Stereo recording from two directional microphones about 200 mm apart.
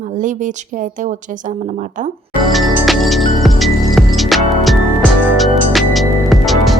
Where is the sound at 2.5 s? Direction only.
Centre (ahead or behind).